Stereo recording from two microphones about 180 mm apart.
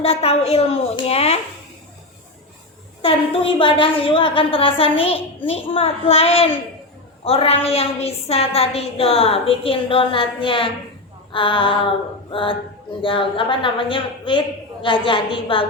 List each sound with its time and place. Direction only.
0.0 s a woman's voice: 35° left (ahead or behind)
3.0 s a woman's voice: 30° left (ahead or behind)
11.3 s female singing: 25° left (ahead or behind)
13.0 s a woman's voice: 30° left (ahead or behind)